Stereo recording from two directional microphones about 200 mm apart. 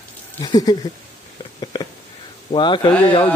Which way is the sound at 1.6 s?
20° left (ahead or behind).